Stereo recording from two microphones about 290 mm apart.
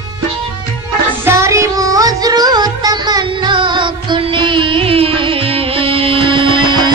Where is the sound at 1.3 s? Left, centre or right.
Centre.